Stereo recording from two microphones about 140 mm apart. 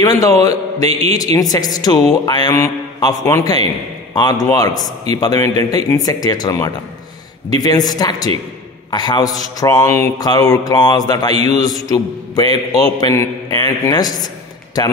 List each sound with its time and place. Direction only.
0.1 s speech: 25° left (ahead or behind)